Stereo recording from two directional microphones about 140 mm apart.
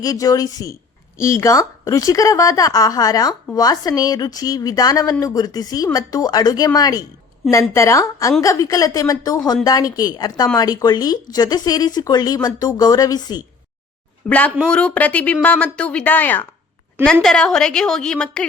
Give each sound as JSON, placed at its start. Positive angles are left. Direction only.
{"t": 0.0, "sound": "speech", "side_deg": 25}
{"t": 14.3, "sound": "a woman's voice", "side_deg": 10}